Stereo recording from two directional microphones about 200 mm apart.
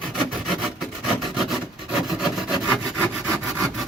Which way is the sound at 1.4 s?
Centre (ahead or behind).